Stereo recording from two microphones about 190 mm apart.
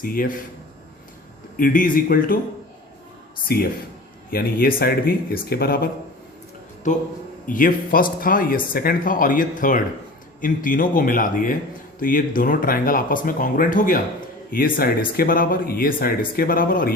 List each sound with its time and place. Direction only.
0.0 s speech: 50° left (ahead or behind)
1.5 s speech: 45° left (ahead or behind)
3.5 s speech: 50° left (ahead or behind)
7.4 s speech: 45° left (ahead or behind)